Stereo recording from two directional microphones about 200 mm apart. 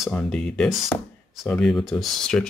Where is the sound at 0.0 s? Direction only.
5° left (ahead or behind).